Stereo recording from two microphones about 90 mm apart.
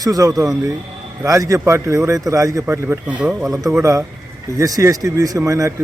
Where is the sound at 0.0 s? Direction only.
40° right (ahead or behind).